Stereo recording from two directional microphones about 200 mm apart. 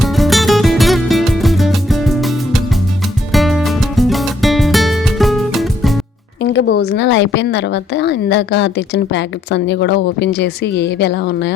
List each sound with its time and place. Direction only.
0.0 s music: centre (ahead or behind)
6.4 s a woman's voice: 65° left (ahead or behind)